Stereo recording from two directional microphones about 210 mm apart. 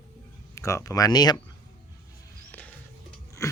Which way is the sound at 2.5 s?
10° left (ahead or behind).